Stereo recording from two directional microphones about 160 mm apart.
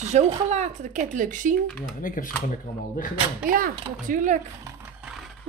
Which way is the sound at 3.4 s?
60° right (ahead or behind).